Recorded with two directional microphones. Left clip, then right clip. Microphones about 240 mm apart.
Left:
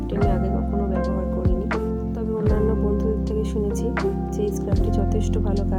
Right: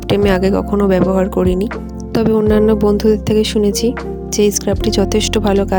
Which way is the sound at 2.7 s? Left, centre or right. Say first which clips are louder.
Right 11 dB; right.